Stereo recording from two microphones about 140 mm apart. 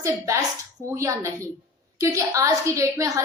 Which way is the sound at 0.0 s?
20° right (ahead or behind).